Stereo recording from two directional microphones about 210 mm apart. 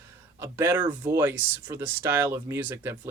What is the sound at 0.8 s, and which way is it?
Speech, 20° right (ahead or behind).